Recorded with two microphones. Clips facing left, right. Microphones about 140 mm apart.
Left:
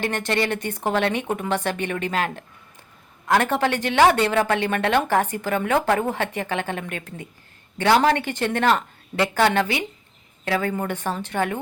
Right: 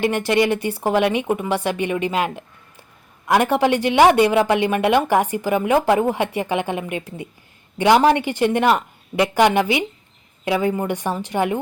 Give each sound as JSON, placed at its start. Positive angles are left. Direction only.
{"t": 0.0, "sound": "speech", "side_deg": -10}